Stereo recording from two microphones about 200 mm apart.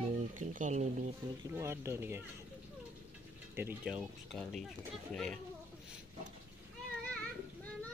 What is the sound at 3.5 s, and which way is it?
Speech, 10° right (ahead or behind).